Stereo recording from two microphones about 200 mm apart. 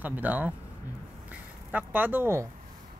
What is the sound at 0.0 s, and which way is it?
Speech, 10° right (ahead or behind).